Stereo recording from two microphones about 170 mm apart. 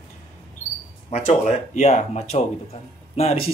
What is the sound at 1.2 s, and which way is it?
Speech, 40° left (ahead or behind).